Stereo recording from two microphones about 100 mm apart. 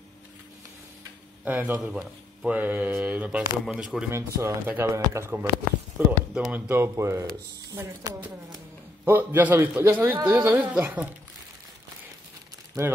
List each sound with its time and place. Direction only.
1.4 s speech: 15° right (ahead or behind)
4.1 s a man's voice: 25° right (ahead or behind)
6.5 s a man's voice: 25° right (ahead or behind)
9.0 s a man's voice: 20° right (ahead or behind)
12.8 s speech: 30° right (ahead or behind)